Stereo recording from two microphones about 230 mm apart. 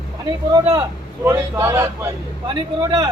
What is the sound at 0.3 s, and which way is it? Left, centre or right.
Speech, centre.